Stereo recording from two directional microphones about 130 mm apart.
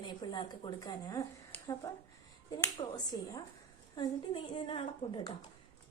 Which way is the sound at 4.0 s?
40° left (ahead or behind).